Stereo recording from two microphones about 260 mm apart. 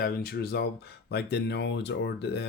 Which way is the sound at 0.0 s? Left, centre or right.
Left.